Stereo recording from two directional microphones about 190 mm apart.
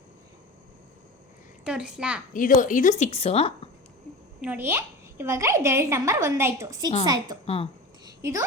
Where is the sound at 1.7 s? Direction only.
5° right (ahead or behind).